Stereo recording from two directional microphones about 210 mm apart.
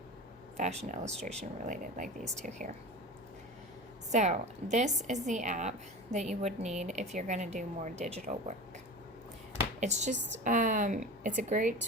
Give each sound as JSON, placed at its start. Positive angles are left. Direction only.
{"t": 0.5, "sound": "speech", "side_deg": -30}
{"t": 1.2, "sound": "speech", "side_deg": 5}
{"t": 1.6, "sound": "a woman's voice", "side_deg": -40}
{"t": 4.1, "sound": "a woman's voice", "side_deg": -35}
{"t": 9.8, "sound": "a woman's voice", "side_deg": -35}